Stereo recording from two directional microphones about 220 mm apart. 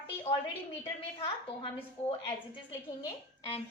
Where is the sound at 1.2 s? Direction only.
25° left (ahead or behind).